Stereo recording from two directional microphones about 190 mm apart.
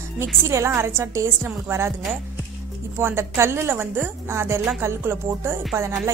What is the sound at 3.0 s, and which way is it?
A woman's voice, 15° right (ahead or behind).